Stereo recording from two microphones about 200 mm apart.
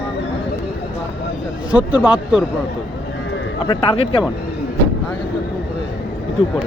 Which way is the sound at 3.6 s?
25° left (ahead or behind).